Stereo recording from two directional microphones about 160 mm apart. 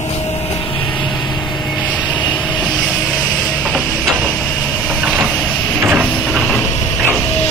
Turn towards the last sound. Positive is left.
turn(degrees=-5)  # may be behind; listen again after turning